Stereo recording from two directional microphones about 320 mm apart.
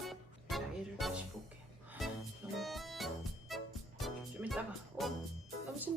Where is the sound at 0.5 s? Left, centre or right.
Centre.